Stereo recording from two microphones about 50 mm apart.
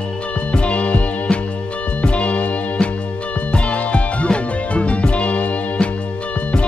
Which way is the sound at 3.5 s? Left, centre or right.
Left.